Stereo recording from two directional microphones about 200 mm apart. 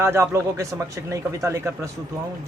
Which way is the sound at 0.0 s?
15° right (ahead or behind).